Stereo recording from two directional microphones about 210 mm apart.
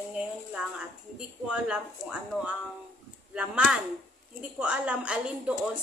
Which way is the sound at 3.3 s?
5° right (ahead or behind).